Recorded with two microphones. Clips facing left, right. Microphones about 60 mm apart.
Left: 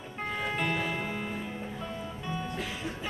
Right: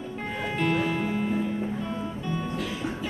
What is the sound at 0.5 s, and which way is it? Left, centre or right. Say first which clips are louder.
Music: right 7 dB; centre.